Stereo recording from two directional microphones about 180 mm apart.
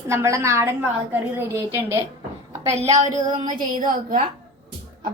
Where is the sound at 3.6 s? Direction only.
50° right (ahead or behind).